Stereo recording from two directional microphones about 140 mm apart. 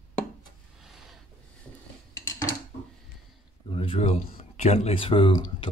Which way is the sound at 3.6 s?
40° left (ahead or behind).